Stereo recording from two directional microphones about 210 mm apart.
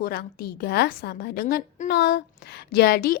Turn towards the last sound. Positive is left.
turn(degrees=45)  # may be behind; listen again after turning